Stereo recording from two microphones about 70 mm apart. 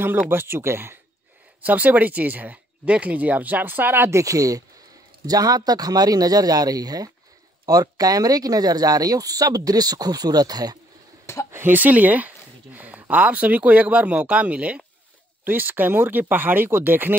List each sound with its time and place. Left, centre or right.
0.3 s speech: right
1.6 s speech: right
4.1 s speech: right
11.5 s a sound: right
13.1 s speech: right